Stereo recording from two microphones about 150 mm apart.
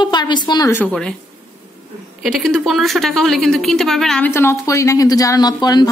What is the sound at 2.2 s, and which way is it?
A woman's voice, centre (ahead or behind).